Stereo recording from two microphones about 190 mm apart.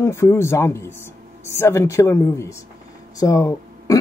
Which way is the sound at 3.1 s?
15° left (ahead or behind).